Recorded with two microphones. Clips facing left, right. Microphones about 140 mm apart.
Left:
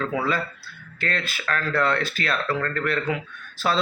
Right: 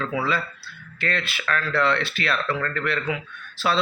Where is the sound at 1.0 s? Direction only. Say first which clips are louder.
Right 1 dB; 40° left (ahead or behind).